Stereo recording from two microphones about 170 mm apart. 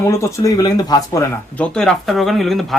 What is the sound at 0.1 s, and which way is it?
Speech, 20° left (ahead or behind).